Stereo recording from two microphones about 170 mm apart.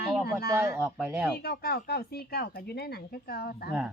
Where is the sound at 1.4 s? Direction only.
65° left (ahead or behind).